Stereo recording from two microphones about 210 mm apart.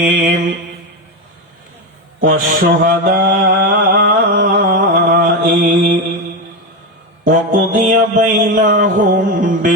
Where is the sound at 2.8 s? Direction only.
45° right (ahead or behind).